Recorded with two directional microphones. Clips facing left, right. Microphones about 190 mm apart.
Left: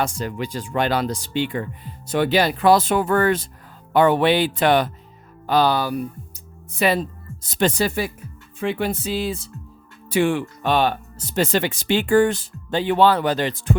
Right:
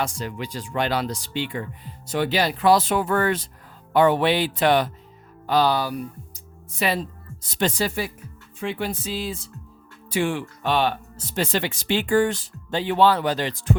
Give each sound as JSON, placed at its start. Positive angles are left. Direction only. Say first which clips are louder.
{"t": 0.0, "sound": "speech", "louder": "left 3 dB", "side_deg": 50}
{"t": 3.9, "sound": "speech", "louder": "left 2 dB", "side_deg": 55}